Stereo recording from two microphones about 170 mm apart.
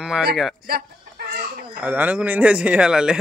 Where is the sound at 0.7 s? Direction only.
65° right (ahead or behind).